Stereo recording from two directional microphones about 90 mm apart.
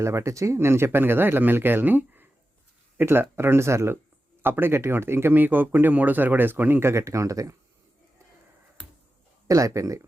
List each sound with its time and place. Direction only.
0.0 s speech: 30° right (ahead or behind)
9.5 s speech: 40° right (ahead or behind)